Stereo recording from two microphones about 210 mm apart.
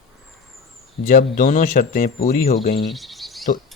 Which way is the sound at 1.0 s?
40° left (ahead or behind).